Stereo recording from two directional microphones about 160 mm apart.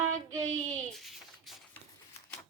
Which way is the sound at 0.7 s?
Centre (ahead or behind).